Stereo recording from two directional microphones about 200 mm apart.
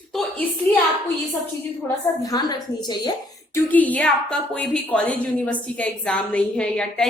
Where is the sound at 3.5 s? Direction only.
10° left (ahead or behind).